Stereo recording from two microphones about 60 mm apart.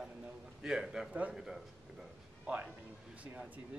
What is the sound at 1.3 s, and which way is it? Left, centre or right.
Speech, centre.